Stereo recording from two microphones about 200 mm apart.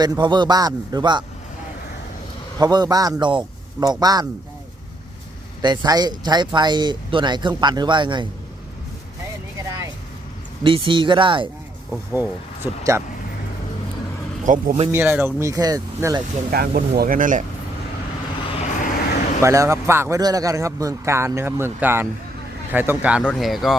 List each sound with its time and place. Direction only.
0.0 s speech: 20° right (ahead or behind)
2.6 s speech: 20° right (ahead or behind)
5.6 s speech: 20° right (ahead or behind)
9.6 s vehicle: 15° right (ahead or behind)
10.6 s speech: 25° right (ahead or behind)
11.9 s a man's voice: 10° right (ahead or behind)
14.4 s speech: 40° right (ahead or behind)
14.9 s a man's voice: 10° right (ahead or behind)
16.5 s speech: 45° right (ahead or behind)
18.5 s vehicle: 35° left (ahead or behind)
19.4 s a man's voice: 15° right (ahead or behind)
23.2 s speech: centre (ahead or behind)